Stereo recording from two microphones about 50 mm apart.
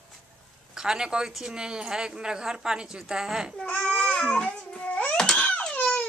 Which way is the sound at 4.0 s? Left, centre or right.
Centre.